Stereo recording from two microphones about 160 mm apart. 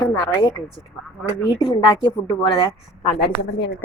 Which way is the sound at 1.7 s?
30° left (ahead or behind).